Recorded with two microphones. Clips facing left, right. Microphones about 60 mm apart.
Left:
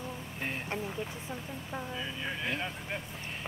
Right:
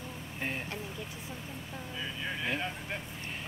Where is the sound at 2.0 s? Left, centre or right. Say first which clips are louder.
Even; centre.